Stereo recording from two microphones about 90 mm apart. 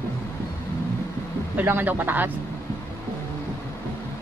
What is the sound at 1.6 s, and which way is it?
Speech, 20° right (ahead or behind).